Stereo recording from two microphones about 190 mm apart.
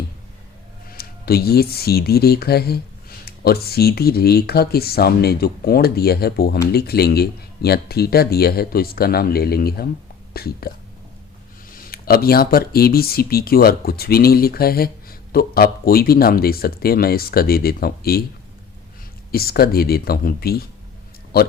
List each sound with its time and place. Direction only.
0.9 s speech: 55° left (ahead or behind)
11.7 s speech: 50° left (ahead or behind)
19.3 s speech: 55° left (ahead or behind)